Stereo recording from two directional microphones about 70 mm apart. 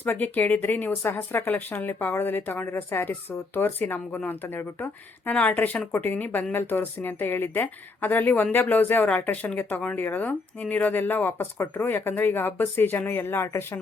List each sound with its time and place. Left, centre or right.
0.0 s speech: left